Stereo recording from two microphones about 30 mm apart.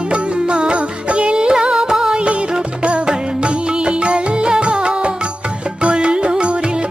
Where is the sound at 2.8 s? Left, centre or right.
Right.